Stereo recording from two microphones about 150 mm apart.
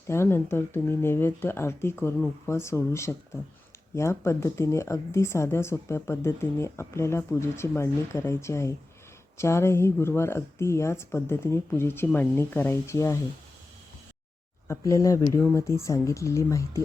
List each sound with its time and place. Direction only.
0.1 s speech: 15° left (ahead or behind)
14.7 s speech: 20° left (ahead or behind)